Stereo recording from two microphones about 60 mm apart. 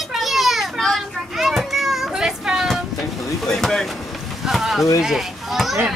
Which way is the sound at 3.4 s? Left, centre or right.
Centre.